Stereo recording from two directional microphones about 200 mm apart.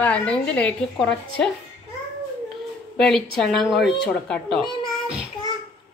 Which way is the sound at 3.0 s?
5° left (ahead or behind).